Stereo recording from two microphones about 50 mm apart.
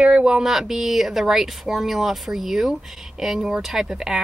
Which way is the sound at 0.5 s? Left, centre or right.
Centre.